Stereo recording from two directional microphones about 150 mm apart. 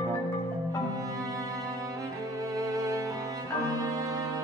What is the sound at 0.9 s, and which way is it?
Music, 25° right (ahead or behind).